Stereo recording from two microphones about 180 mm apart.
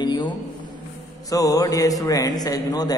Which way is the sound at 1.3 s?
20° left (ahead or behind).